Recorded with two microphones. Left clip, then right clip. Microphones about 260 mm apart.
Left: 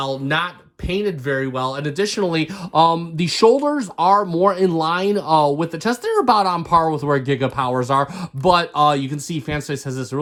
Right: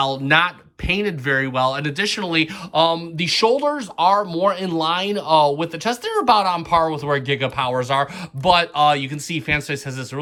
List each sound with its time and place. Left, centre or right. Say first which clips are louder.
0.0 s speech: right 4 dB; centre